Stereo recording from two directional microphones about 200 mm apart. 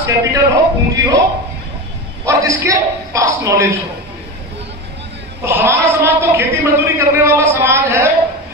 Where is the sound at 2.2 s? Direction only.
15° right (ahead or behind).